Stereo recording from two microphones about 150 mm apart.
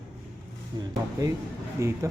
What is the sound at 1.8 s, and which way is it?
Speech, 20° right (ahead or behind).